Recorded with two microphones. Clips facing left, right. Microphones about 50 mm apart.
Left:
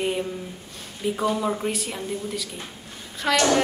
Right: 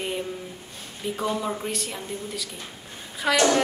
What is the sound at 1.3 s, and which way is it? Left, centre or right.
A woman's voice, centre.